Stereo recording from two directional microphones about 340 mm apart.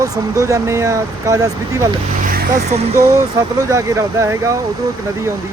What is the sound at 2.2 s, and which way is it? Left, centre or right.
Vehicle, right.